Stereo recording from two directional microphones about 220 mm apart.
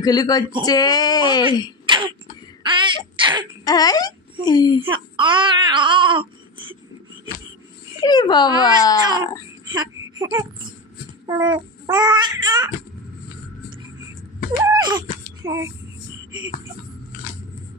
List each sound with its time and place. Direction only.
0.0 s speech: 15° left (ahead or behind)
1.9 s throat clearing: 20° right (ahead or behind)
2.6 s a sound: 20° right (ahead or behind)
3.2 s throat clearing: 20° right (ahead or behind)
3.6 s speech: 15° left (ahead or behind)
4.9 s speech: 20° right (ahead or behind)
8.0 s speech: 20° left (ahead or behind)
9.7 s a sound: 20° right (ahead or behind)
11.2 s a child's voice: 15° right (ahead or behind)
14.7 s a sound: 20° right (ahead or behind)
15.4 s speech: 15° right (ahead or behind)